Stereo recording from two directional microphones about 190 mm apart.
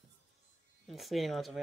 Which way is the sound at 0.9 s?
Centre (ahead or behind).